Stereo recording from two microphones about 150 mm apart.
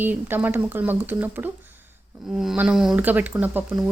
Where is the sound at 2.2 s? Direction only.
Centre (ahead or behind).